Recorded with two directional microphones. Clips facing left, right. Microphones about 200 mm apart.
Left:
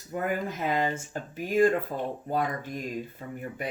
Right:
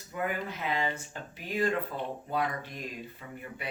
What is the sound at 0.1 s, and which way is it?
Speech, 45° left (ahead or behind).